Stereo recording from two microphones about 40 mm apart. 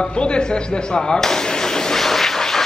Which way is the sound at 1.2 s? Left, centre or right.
Centre.